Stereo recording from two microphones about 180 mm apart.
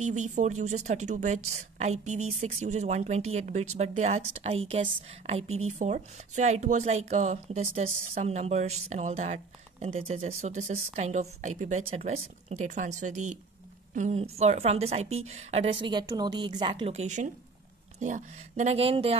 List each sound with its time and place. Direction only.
0.0 s a woman's voice: 40° right (ahead or behind)